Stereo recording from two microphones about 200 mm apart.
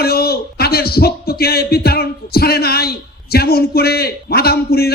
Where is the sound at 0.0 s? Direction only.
50° left (ahead or behind).